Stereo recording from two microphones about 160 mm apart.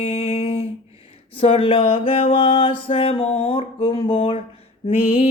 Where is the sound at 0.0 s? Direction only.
40° left (ahead or behind).